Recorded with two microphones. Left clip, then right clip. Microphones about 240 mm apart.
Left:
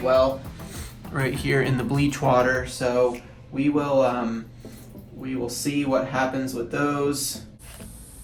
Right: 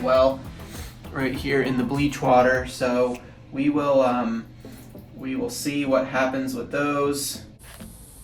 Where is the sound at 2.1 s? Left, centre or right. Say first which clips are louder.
Right 3 dB; left.